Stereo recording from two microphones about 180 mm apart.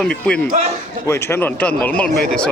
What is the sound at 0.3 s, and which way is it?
A man's voice, 5° left (ahead or behind).